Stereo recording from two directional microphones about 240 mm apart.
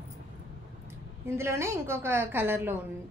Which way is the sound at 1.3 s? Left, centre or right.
Centre.